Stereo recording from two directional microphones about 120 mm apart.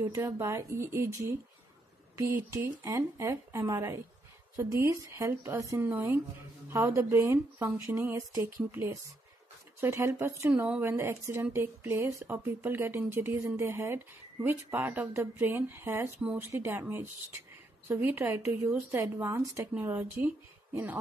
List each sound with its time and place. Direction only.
0.1 s speech: 20° right (ahead or behind)